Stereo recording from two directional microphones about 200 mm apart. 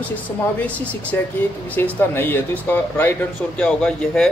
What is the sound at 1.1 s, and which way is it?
Speech, 10° left (ahead or behind).